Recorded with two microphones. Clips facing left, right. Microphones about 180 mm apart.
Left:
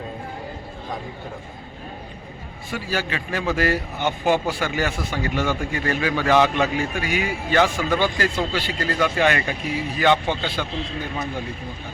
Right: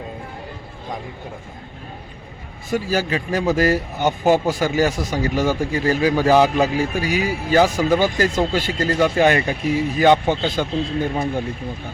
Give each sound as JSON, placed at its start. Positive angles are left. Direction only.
{"t": 2.6, "sound": "speech", "side_deg": -40}